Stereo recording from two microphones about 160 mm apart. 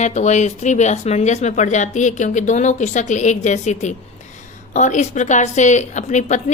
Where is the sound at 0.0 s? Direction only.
45° left (ahead or behind).